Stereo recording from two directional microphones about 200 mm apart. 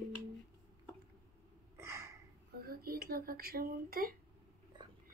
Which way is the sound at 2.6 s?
50° right (ahead or behind).